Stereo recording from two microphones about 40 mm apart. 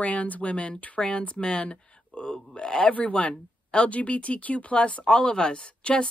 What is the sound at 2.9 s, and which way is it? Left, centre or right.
Speech, left.